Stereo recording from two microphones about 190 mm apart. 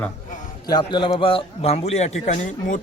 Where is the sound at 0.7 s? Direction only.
20° left (ahead or behind).